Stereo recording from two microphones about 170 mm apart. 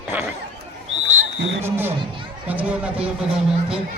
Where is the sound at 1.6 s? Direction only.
10° right (ahead or behind).